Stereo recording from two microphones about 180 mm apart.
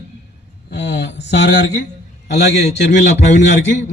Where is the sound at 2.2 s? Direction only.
70° left (ahead or behind).